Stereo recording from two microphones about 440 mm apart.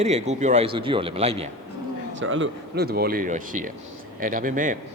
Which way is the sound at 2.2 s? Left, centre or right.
Right.